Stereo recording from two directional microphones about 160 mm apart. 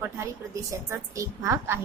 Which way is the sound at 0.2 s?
20° right (ahead or behind).